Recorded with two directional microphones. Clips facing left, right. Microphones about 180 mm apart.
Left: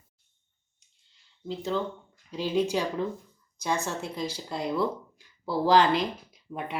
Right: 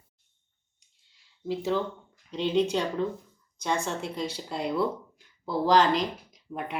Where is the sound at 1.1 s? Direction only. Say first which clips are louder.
Right 4 dB; 5° right (ahead or behind).